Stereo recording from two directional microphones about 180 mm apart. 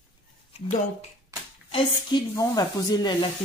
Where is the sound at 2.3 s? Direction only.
20° left (ahead or behind).